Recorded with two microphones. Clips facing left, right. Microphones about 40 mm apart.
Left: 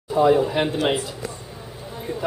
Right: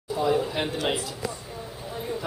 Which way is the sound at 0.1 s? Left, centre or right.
Left.